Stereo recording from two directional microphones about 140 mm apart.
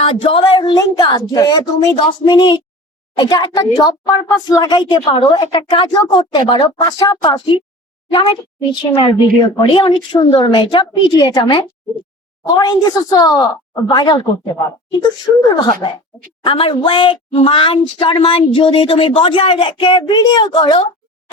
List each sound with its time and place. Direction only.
0.0 s speech: 40° left (ahead or behind)
8.7 s speech: 35° left (ahead or behind)